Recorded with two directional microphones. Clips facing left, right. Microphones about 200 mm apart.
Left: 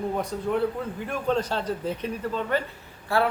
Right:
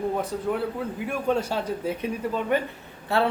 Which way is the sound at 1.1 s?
10° right (ahead or behind).